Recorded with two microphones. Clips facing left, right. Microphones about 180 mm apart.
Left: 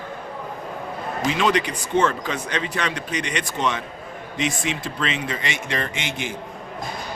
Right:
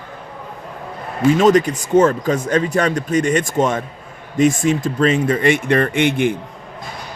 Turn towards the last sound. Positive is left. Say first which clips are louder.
# right 13 dB
turn(degrees=-55)  # may be behind; listen again after turning